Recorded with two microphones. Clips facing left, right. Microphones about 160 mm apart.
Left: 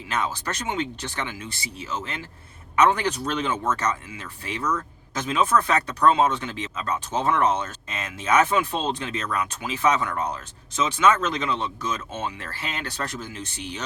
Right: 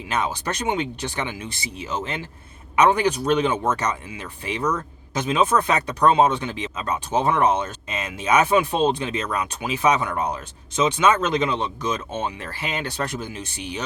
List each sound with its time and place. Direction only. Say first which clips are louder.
0.1 s speech: right 2 dB; 15° right (ahead or behind)